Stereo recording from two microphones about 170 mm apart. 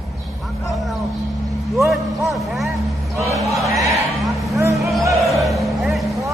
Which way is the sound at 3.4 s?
20° right (ahead or behind).